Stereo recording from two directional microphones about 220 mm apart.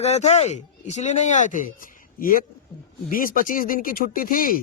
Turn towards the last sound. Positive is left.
turn(degrees=40)  # may be behind; listen again after turning